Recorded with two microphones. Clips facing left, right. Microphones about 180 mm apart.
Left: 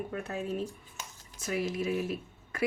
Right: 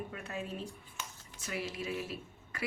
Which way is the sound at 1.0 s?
45° left (ahead or behind).